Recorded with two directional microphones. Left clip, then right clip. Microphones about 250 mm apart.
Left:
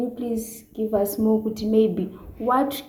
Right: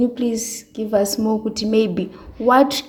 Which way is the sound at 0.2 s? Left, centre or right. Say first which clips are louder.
Right 6 dB; right.